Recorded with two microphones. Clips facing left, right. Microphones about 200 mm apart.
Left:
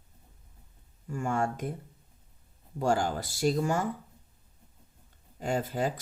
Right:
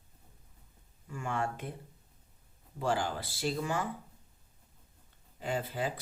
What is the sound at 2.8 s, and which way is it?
Speech, 45° left (ahead or behind).